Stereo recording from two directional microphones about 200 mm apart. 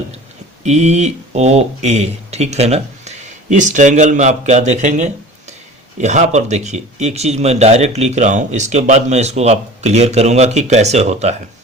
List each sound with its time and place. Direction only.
0.6 s speech: 35° right (ahead or behind)